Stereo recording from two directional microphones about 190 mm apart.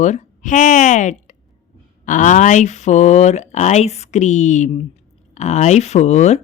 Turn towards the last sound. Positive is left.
turn(degrees=35)  # may be behind; listen again after turning